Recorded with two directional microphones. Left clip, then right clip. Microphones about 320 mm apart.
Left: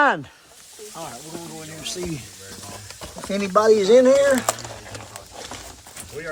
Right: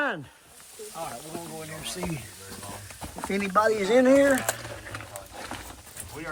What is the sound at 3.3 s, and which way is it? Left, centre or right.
Speech, centre.